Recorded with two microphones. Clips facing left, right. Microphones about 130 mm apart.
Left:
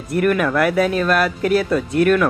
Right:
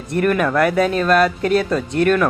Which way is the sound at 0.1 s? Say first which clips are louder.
Even; 5° left (ahead or behind).